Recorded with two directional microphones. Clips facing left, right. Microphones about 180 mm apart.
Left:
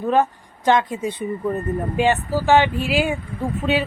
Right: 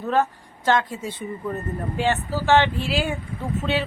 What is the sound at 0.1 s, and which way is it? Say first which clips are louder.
A woman's voice: left 3 dB; 15° left (ahead or behind).